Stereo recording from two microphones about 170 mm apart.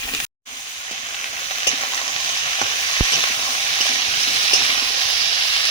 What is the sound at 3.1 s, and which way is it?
Frying, 30° left (ahead or behind).